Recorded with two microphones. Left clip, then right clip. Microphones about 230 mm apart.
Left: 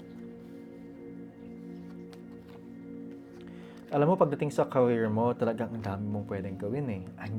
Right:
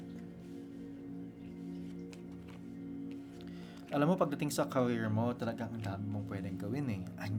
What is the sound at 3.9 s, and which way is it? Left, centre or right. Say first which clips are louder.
Speech: left 7 dB; centre.